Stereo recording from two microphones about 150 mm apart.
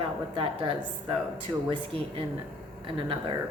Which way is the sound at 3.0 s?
35° right (ahead or behind).